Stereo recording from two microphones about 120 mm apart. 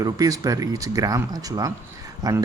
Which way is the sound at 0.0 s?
30° right (ahead or behind).